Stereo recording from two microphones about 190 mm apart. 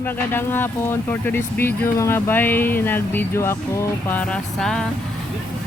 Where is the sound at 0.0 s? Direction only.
10° left (ahead or behind).